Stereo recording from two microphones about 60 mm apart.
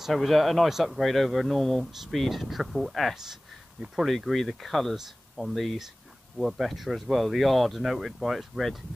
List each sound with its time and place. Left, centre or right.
0.0 s speech: centre